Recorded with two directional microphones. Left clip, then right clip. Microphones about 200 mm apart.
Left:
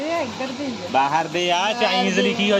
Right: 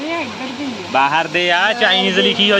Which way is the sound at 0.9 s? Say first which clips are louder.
Right 5 dB; 5° right (ahead or behind).